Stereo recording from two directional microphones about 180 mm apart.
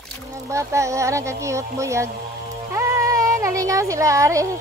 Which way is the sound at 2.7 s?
15° right (ahead or behind).